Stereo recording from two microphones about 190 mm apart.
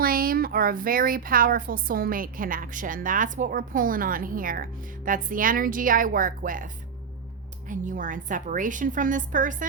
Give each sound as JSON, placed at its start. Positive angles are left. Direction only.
{"t": 0.0, "sound": "speech", "side_deg": -50}
{"t": 7.7, "sound": "speech", "side_deg": -45}